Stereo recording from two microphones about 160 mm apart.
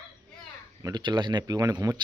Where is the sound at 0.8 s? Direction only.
25° right (ahead or behind).